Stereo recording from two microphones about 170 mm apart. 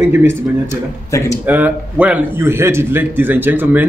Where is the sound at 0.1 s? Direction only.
15° right (ahead or behind).